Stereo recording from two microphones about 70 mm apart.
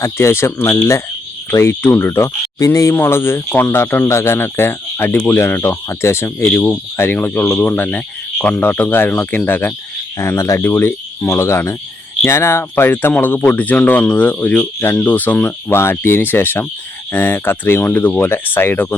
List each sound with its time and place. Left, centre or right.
0.0 s speech: left
2.6 s speech: left
2.9 s speech: left
6.5 s speech: left
7.2 s speech: left
10.2 s speech: left
15.7 s speech: left